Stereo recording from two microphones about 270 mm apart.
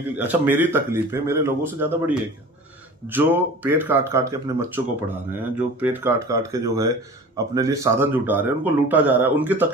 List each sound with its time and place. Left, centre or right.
0.2 s speech: centre